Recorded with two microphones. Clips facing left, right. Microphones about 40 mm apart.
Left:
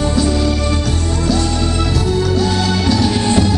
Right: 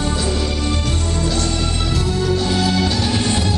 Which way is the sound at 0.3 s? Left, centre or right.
Left.